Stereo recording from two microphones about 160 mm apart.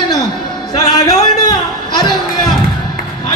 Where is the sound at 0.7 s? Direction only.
25° left (ahead or behind).